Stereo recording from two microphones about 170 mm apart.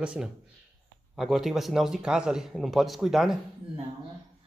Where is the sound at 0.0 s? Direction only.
5° right (ahead or behind).